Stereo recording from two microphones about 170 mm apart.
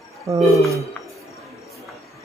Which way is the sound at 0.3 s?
20° right (ahead or behind).